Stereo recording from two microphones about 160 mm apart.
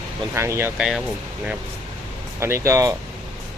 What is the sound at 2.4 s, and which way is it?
Speech, 15° right (ahead or behind).